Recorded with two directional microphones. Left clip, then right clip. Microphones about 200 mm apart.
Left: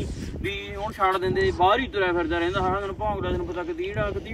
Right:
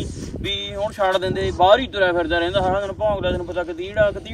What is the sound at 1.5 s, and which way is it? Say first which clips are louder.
Speech: right 8 dB; 35° right (ahead or behind).